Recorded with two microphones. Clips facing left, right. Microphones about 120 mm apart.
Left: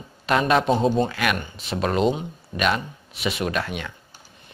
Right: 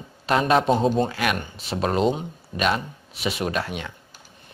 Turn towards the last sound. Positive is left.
turn(degrees=-25)  # may be behind; listen again after turning